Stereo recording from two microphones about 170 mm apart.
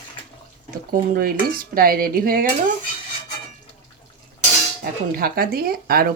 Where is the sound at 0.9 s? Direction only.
60° right (ahead or behind).